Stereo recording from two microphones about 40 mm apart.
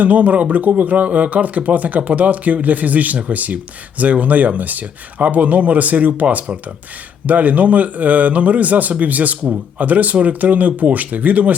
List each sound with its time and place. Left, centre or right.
0.0 s speech: right